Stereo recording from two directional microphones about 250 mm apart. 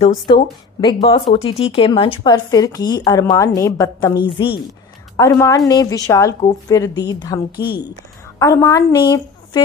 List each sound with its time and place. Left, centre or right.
0.3 s a woman's voice: centre